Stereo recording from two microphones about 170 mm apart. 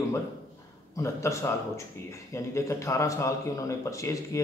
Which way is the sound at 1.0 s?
15° left (ahead or behind).